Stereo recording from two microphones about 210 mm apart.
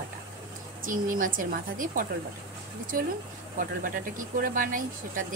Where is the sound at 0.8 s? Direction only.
40° right (ahead or behind).